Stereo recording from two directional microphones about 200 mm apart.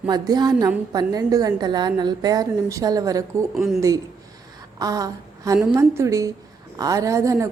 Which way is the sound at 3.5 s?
Centre (ahead or behind).